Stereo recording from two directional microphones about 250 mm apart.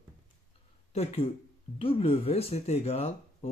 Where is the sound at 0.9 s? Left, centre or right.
Left.